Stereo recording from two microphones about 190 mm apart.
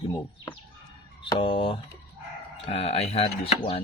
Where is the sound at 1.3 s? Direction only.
25° left (ahead or behind).